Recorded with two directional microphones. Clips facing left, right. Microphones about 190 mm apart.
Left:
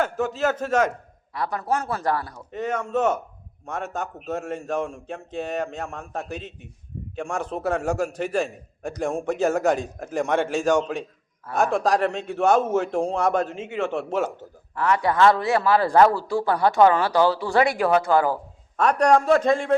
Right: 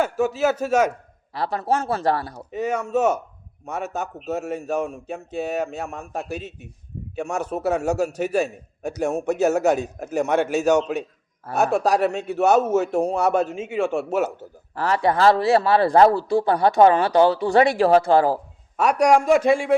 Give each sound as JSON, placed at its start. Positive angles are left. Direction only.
{"t": 0.0, "sound": "a man's voice", "side_deg": -10}
{"t": 1.3, "sound": "a man's voice", "side_deg": -30}
{"t": 2.5, "sound": "a man's voice", "side_deg": -10}
{"t": 14.8, "sound": "a man's voice", "side_deg": -30}
{"t": 18.8, "sound": "a man's voice", "side_deg": -10}